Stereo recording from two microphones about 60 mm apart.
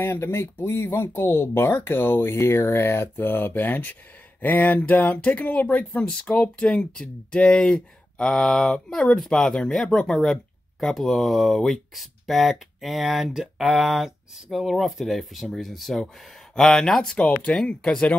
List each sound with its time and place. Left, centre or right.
0.0 s speech: left; by 17.2 s centre
17.2 s speech: centre
17.6 s speech: centre